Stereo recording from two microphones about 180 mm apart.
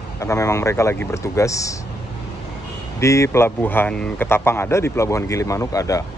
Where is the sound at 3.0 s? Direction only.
15° left (ahead or behind).